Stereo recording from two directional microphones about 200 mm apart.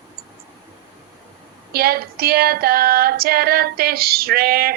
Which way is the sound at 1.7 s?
50° right (ahead or behind).